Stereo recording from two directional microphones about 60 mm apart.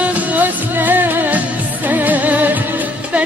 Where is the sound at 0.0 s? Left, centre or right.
Right.